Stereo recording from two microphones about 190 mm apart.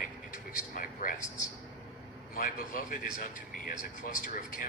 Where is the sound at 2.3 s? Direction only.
45° left (ahead or behind).